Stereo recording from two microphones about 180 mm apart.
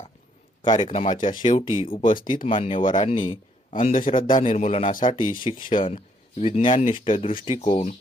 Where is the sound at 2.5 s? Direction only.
30° left (ahead or behind).